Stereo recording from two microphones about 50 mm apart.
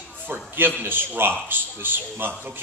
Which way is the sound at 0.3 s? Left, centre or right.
Right.